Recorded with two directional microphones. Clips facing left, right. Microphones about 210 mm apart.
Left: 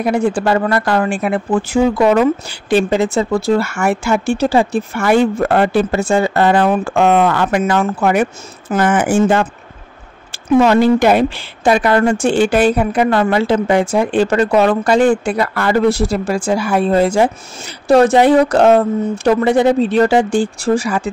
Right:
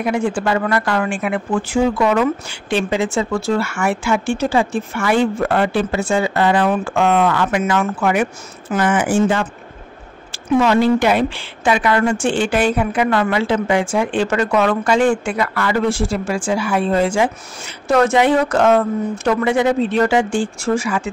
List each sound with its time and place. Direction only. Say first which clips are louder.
0.0 s a woman's voice: left 3 dB; 35° left (ahead or behind)
10.6 s a woman's voice: left 3 dB; 45° left (ahead or behind)